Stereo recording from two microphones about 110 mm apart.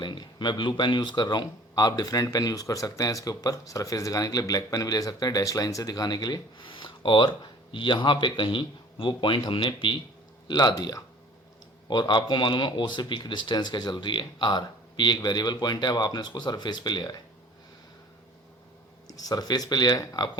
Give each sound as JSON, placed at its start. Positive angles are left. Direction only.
{"t": 0.0, "sound": "a man's voice", "side_deg": 45}
{"t": 19.0, "sound": "speech", "side_deg": 35}